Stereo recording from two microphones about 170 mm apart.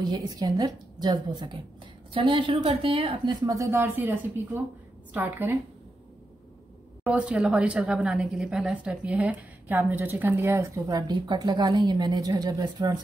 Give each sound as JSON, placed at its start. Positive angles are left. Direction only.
{"t": 0.0, "sound": "a woman's voice", "side_deg": -25}
{"t": 7.1, "sound": "a woman's voice", "side_deg": -5}